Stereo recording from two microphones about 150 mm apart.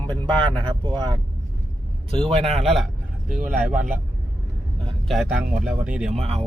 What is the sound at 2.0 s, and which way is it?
Speech, 35° right (ahead or behind).